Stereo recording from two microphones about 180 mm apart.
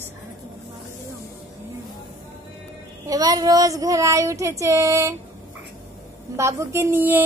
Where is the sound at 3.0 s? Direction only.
20° right (ahead or behind).